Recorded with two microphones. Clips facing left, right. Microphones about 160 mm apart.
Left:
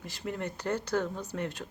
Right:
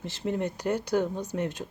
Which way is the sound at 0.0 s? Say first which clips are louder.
Right 6 dB; 25° right (ahead or behind).